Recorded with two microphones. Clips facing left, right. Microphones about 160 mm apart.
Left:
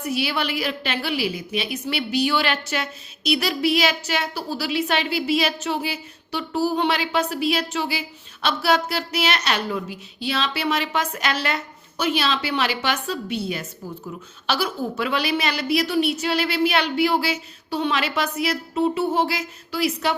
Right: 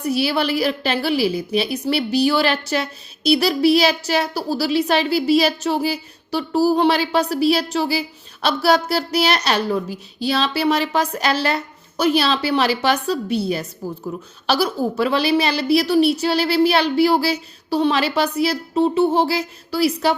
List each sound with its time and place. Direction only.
0.0 s a woman's voice: 35° right (ahead or behind)